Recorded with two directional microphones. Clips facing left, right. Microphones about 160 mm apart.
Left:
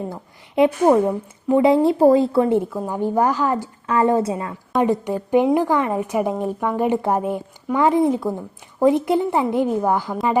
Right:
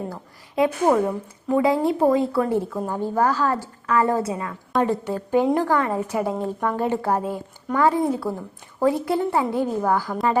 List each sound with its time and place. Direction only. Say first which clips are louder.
0.1 s a woman's voice: left 4 dB; 25° left (ahead or behind)
2.6 s a woman's voice: left 3 dB; 10° left (ahead or behind); by 4.5 s 25° left (ahead or behind)
4.8 s a woman's voice: left 3 dB; 15° left (ahead or behind)